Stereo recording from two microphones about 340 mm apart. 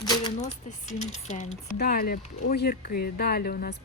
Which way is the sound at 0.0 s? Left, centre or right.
Centre.